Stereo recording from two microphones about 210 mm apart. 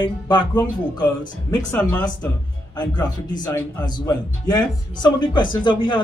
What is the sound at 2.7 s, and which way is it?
Speech, 20° left (ahead or behind).